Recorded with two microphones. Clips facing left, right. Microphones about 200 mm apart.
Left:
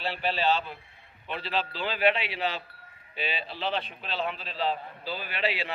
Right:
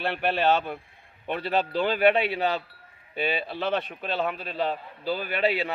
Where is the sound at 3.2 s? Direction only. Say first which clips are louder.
Right 6 dB; 50° right (ahead or behind).